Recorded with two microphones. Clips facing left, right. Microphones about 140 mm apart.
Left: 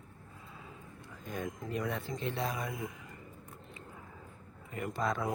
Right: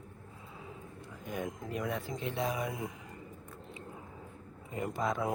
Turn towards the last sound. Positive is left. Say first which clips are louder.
# right 1 dB
turn(degrees=-20)  # may be behind; listen again after turning